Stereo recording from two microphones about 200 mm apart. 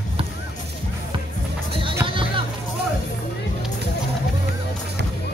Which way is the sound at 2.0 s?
25° right (ahead or behind).